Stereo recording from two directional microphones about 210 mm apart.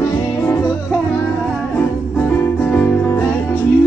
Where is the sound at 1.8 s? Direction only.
10° left (ahead or behind).